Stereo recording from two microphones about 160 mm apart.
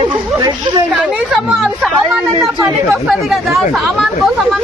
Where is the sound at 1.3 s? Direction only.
Centre (ahead or behind).